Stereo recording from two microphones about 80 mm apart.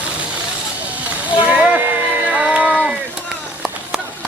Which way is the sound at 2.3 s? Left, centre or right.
Centre.